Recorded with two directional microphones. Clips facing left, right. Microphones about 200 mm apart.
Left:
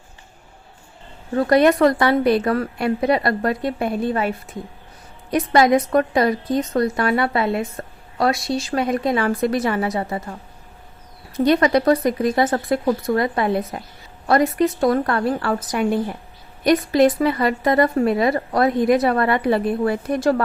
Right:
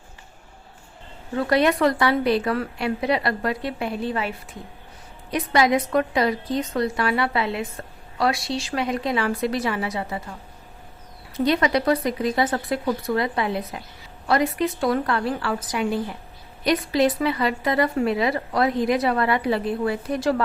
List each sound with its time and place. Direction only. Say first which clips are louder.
1.4 s a woman's voice: left 5 dB; 45° left (ahead or behind)
11.3 s a woman's voice: left 5 dB; 45° left (ahead or behind)